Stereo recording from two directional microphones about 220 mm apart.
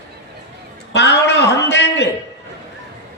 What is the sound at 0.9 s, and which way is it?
Speech, 50° left (ahead or behind).